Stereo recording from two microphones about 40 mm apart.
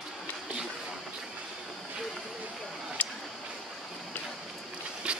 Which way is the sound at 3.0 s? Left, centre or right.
Left.